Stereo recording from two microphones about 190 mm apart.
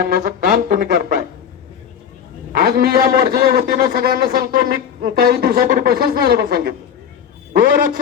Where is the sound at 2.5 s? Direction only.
50° right (ahead or behind).